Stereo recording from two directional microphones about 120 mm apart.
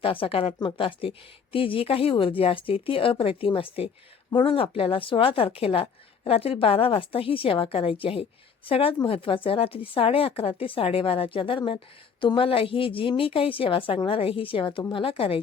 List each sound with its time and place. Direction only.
0.0 s speech: 50° left (ahead or behind)